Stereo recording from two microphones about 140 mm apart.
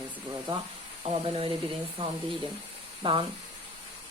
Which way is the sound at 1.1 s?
40° right (ahead or behind).